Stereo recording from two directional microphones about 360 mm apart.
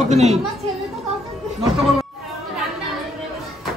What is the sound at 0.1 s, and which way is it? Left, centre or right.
Speech, centre.